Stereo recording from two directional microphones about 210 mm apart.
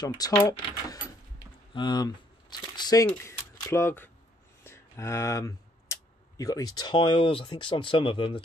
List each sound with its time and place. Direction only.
0.0 s speech: 15° left (ahead or behind)